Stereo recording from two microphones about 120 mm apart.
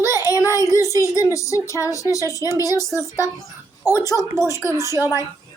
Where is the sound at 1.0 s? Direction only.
25° left (ahead or behind).